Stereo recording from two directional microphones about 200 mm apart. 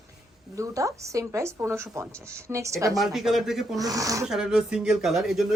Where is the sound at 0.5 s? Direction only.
15° right (ahead or behind).